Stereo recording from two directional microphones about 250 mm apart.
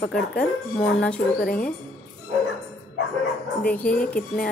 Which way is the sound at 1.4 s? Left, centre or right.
Left.